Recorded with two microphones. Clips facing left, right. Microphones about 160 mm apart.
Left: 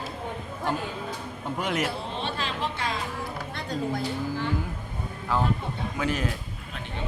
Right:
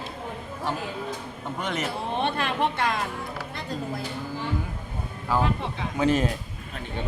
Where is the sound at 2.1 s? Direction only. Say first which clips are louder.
Right 5 dB; 60° right (ahead or behind).